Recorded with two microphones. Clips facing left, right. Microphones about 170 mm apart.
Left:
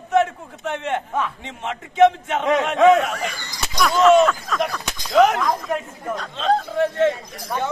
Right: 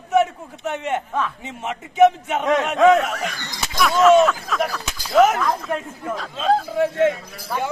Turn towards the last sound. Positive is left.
turn(degrees=-10)  # may be behind; listen again after turning